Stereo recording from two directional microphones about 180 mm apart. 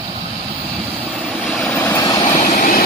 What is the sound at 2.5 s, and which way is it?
Vehicle, 50° left (ahead or behind).